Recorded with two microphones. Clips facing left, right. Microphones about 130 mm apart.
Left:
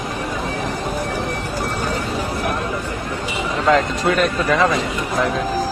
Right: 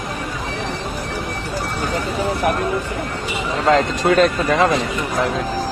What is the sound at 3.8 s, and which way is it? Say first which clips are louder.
Speech: right 3 dB; 25° right (ahead or behind).